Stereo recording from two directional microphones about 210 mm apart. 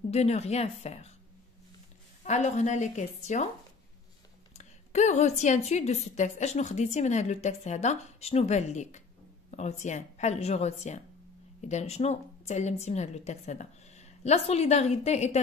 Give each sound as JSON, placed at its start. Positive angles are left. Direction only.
{"t": 0.1, "sound": "a woman's voice", "side_deg": 30}
{"t": 2.2, "sound": "a woman's voice", "side_deg": 35}
{"t": 4.6, "sound": "a woman's voice", "side_deg": 35}